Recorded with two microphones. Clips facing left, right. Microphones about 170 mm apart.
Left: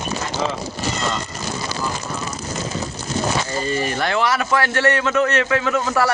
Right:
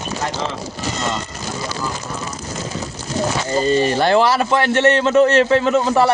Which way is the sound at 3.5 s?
30° right (ahead or behind).